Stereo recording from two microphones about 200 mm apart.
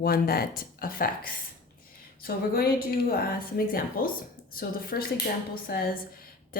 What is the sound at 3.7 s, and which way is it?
A woman's voice, 45° left (ahead or behind).